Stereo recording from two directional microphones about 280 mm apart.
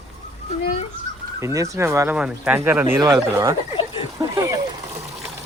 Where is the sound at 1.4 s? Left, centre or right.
Centre.